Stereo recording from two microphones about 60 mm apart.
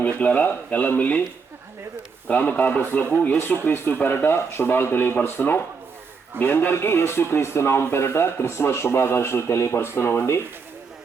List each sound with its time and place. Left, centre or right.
0.0 s speech: left
2.2 s a man's voice: left